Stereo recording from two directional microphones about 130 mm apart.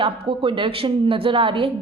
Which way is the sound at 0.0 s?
40° right (ahead or behind).